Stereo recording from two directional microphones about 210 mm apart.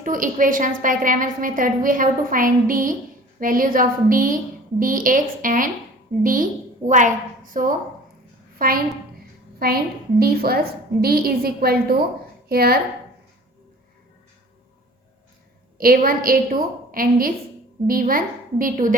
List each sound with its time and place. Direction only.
0.0 s a woman's voice: 40° right (ahead or behind)
15.8 s a woman's voice: 45° right (ahead or behind)